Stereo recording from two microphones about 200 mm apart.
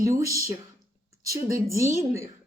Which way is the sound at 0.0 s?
15° right (ahead or behind).